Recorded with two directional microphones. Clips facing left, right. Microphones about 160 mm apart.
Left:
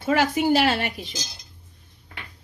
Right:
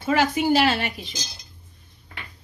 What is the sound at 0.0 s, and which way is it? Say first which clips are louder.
A woman's voice: even; 55° left (ahead or behind).